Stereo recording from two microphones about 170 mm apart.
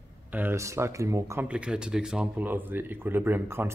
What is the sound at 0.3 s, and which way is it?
Speech, 10° right (ahead or behind).